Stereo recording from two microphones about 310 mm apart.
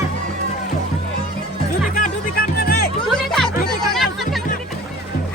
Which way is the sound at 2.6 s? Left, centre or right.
Left.